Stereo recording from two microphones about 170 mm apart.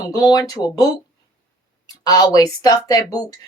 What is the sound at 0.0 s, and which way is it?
Speech, 25° left (ahead or behind).